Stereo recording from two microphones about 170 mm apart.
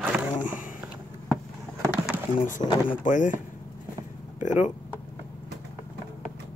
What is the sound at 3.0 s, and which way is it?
Speech, 50° left (ahead or behind).